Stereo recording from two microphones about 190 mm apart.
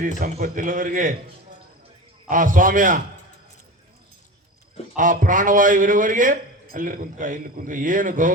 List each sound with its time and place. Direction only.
0.2 s a man's voice: 50° right (ahead or behind)
2.2 s a man's voice: 45° right (ahead or behind)
4.9 s a man's voice: 45° right (ahead or behind)